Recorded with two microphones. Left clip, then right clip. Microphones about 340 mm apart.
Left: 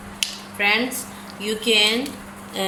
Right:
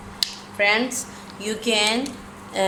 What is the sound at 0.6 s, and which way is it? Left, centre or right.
Speech, right.